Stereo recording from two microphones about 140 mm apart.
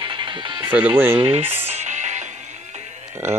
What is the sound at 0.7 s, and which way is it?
Speech, 15° right (ahead or behind).